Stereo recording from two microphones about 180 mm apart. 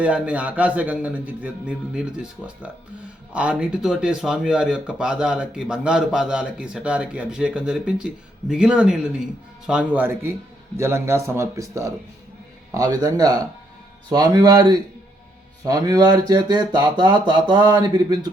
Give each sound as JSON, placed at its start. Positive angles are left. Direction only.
{"t": 0.0, "sound": "a man's voice", "side_deg": -5}